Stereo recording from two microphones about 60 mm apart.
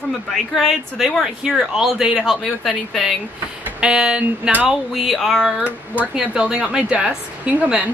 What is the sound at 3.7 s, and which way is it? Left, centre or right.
A woman's voice, centre.